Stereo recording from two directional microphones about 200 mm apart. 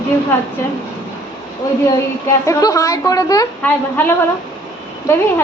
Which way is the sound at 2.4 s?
15° left (ahead or behind).